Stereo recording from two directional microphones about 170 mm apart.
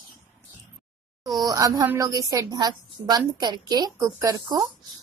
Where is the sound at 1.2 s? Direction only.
20° right (ahead or behind).